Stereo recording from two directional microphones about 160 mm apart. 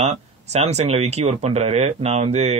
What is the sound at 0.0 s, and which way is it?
A man's voice, 45° right (ahead or behind).